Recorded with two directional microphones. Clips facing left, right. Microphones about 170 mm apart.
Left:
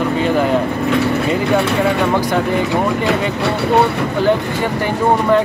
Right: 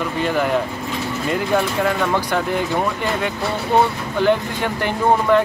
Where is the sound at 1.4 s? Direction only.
70° left (ahead or behind).